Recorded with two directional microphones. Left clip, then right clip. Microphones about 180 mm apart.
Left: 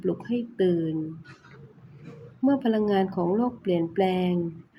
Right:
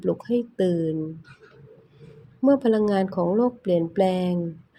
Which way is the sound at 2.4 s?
30° right (ahead or behind).